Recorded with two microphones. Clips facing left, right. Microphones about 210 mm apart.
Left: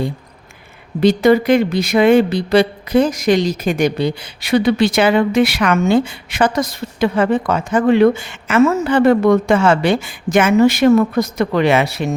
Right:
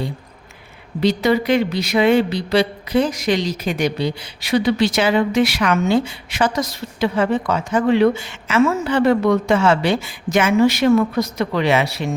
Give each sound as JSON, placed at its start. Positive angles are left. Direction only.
{"t": 1.0, "sound": "speech", "side_deg": 50}